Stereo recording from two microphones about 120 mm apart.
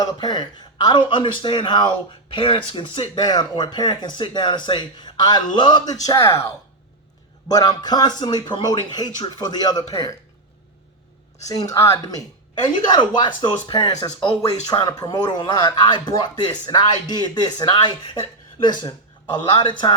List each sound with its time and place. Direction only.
0.0 s speech: 35° left (ahead or behind)
7.4 s a man's voice: 35° left (ahead or behind)
11.7 s a man's voice: 25° left (ahead or behind)
12.9 s a man's voice: 40° left (ahead or behind)